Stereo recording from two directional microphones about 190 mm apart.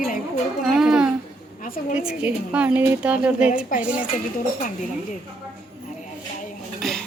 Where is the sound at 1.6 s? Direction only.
45° left (ahead or behind).